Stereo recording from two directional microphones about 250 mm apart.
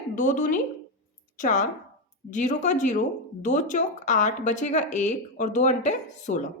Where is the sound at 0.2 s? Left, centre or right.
Left.